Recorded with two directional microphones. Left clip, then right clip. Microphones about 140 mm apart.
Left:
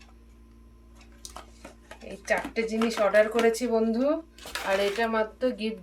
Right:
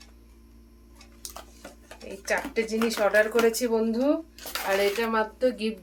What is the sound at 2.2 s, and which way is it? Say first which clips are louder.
Speech: even; 20° right (ahead or behind).